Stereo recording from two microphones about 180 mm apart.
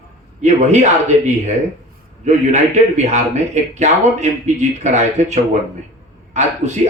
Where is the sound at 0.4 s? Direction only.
40° right (ahead or behind).